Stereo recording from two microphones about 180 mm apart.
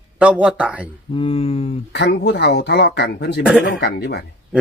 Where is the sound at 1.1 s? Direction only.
30° left (ahead or behind).